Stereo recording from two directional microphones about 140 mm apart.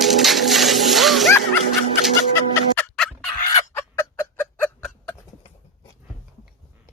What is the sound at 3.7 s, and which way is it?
Fowl, 20° left (ahead or behind).